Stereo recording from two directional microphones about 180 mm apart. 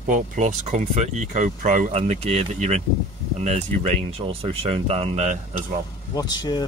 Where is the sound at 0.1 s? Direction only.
40° right (ahead or behind).